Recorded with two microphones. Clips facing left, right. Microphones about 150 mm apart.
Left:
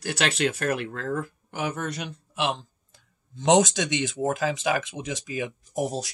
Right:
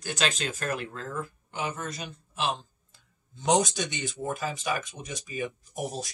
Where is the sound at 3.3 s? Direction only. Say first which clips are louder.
Left 5 dB; 90° left.